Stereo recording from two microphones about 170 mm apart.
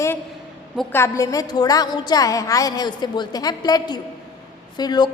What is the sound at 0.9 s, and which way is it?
A woman's voice, 15° left (ahead or behind).